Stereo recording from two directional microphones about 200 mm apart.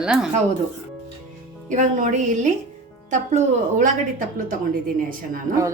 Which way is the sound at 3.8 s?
45° right (ahead or behind).